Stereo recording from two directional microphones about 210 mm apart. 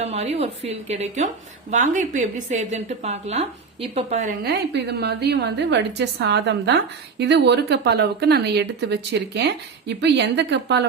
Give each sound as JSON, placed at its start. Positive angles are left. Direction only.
{"t": 0.0, "sound": "speech", "side_deg": -30}
{"t": 4.4, "sound": "a woman's voice", "side_deg": -50}